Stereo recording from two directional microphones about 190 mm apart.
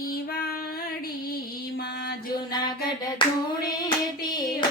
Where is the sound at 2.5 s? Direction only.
20° left (ahead or behind).